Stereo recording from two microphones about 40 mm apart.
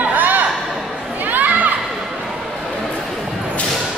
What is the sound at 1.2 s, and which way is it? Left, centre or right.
Children playing, right.